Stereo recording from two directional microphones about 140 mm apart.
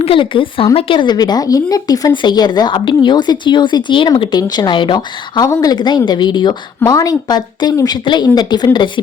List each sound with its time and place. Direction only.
0.0 s a woman's voice: 40° left (ahead or behind)